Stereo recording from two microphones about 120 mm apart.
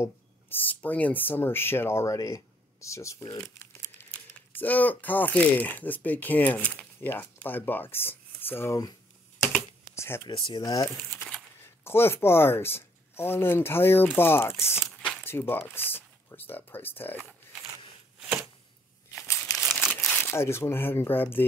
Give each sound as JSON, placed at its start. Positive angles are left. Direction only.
{"t": 0.0, "sound": "speech", "side_deg": 15}
{"t": 4.5, "sound": "speech", "side_deg": 15}
{"t": 9.9, "sound": "speech", "side_deg": 20}
{"t": 10.2, "sound": "speech", "side_deg": 45}
{"t": 10.6, "sound": "speech", "side_deg": 25}
{"t": 19.1, "sound": "crumpling", "side_deg": 25}
{"t": 19.5, "sound": "crumpling", "side_deg": 0}
{"t": 20.1, "sound": "speech", "side_deg": 20}